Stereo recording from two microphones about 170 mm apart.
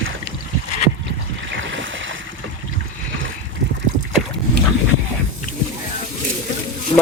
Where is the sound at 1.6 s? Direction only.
90° right.